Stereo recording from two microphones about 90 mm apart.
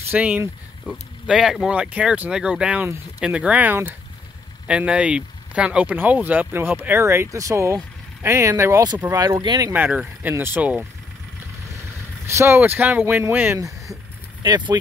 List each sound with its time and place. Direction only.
0.1 s speech: 15° right (ahead or behind); by 8.8 s 30° right (ahead or behind)
9.0 s speech: 20° right (ahead or behind)
9.4 s speech: 55° right (ahead or behind)
9.7 s speech: 20° right (ahead or behind)
10.6 s speech: 15° right (ahead or behind)
12.3 s speech: 30° right (ahead or behind)
12.5 s speech: 20° right (ahead or behind)
13.6 s speech: 35° right (ahead or behind)
14.4 s speech: 50° right (ahead or behind)